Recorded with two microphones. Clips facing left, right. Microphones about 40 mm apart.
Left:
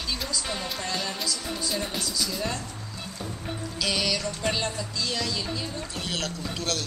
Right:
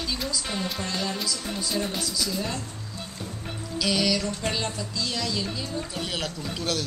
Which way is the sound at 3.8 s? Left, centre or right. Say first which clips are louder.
Right 3 dB; centre.